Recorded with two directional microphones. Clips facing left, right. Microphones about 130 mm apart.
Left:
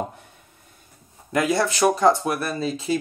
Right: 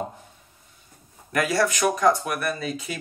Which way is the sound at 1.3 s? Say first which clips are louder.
Left 1 dB; 20° left (ahead or behind).